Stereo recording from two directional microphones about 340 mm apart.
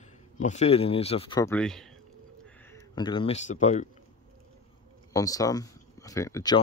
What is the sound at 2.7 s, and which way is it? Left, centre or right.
Speech, centre.